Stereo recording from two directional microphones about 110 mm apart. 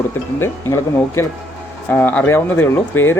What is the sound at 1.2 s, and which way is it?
Speech, 25° left (ahead or behind).